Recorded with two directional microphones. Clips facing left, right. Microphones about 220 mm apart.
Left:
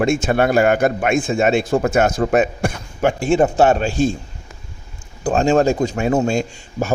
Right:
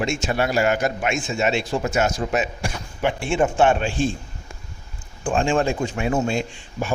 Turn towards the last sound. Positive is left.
turn(degrees=45)  # may be behind; listen again after turning